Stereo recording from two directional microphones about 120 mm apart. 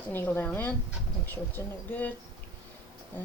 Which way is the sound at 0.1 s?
20° left (ahead or behind).